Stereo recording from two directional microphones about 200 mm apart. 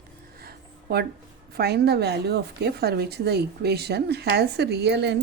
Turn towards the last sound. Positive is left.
turn(degrees=-60)  # may be behind; listen again after turning